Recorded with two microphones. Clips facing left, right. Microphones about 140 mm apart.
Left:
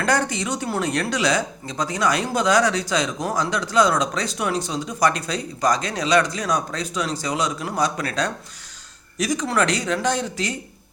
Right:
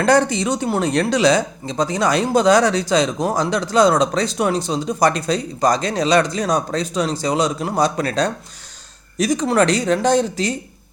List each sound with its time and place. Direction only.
0.0 s speech: 25° right (ahead or behind)